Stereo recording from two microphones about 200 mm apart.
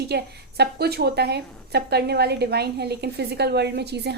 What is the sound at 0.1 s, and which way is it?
A woman's voice, 55° right (ahead or behind).